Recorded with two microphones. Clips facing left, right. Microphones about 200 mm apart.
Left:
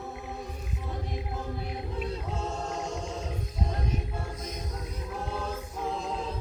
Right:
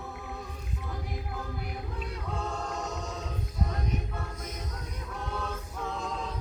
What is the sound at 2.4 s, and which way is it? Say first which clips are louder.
Choir: right 1 dB; 25° left (ahead or behind).